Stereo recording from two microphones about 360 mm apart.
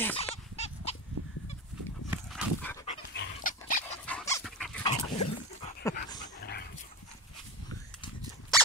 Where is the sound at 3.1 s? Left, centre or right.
Left.